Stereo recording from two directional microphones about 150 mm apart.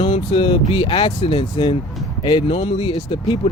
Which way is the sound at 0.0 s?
35° left (ahead or behind).